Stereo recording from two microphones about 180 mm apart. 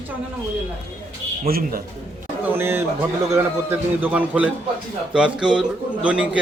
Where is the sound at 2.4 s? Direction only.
15° right (ahead or behind).